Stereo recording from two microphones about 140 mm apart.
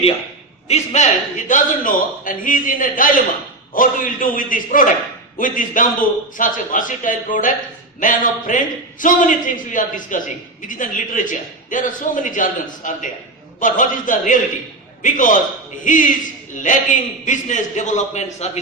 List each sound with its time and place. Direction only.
0.7 s a man's voice: 55° left (ahead or behind)